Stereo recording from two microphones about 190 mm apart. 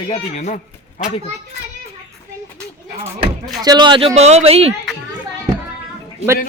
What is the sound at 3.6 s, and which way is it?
Speech, 25° right (ahead or behind).